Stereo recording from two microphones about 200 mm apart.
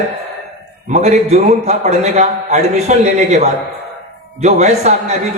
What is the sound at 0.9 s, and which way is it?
A man's voice, 35° right (ahead or behind).